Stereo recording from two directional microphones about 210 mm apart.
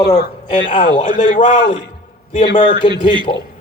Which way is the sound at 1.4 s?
25° left (ahead or behind).